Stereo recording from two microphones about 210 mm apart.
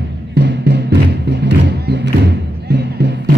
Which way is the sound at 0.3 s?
55° right (ahead or behind).